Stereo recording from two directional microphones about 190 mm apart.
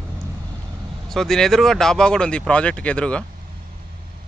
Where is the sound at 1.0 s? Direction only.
Centre (ahead or behind).